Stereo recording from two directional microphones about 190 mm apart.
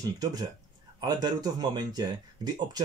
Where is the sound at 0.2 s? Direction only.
20° right (ahead or behind).